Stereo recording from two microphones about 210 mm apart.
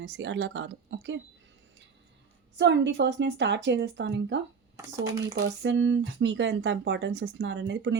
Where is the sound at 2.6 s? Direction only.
55° right (ahead or behind).